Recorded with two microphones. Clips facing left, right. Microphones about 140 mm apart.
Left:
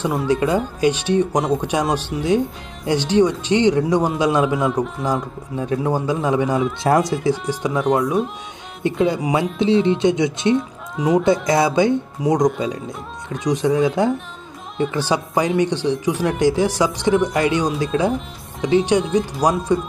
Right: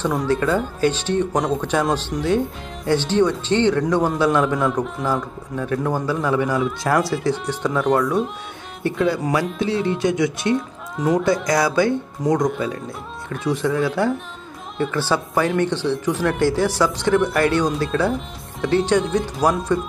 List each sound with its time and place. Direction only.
0.0 s speech: 10° left (ahead or behind)
8.8 s speech: 20° left (ahead or behind)
11.0 s speech: 10° left (ahead or behind)
11.4 s speech: 25° left (ahead or behind)